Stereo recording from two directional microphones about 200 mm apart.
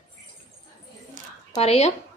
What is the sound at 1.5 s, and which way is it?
Speech, 30° left (ahead or behind).